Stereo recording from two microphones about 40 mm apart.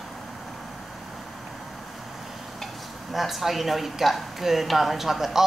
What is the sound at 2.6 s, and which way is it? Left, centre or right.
A woman's voice, centre.